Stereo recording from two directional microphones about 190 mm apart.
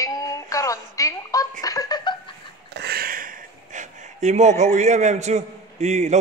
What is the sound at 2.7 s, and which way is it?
Speech, 55° right (ahead or behind).